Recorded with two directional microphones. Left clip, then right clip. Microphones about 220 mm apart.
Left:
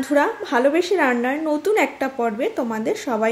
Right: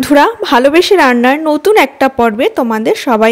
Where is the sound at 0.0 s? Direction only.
45° right (ahead or behind).